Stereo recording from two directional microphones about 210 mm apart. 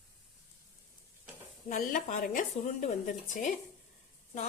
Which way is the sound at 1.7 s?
35° left (ahead or behind).